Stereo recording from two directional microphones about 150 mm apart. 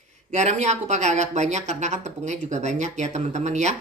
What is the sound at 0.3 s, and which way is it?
Speech, 50° right (ahead or behind).